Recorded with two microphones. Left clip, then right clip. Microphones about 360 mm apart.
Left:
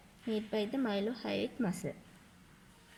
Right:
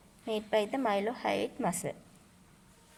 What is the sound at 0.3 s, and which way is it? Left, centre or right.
A woman's voice, right.